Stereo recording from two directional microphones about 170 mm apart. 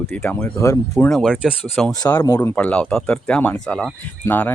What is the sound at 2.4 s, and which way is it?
Speech, 10° left (ahead or behind).